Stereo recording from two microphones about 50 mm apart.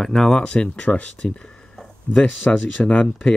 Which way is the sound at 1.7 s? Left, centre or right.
Centre.